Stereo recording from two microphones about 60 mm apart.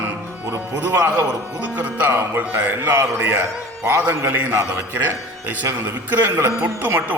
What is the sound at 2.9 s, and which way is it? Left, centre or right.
Speech, right.